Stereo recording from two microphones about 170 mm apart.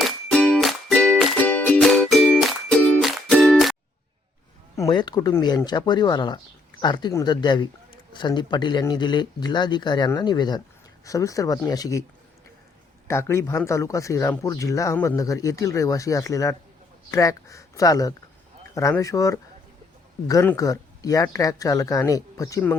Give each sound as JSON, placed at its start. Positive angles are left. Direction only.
{"t": 0.0, "sound": "music", "side_deg": 5}
{"t": 4.8, "sound": "speech", "side_deg": 25}
{"t": 13.1, "sound": "speech", "side_deg": 15}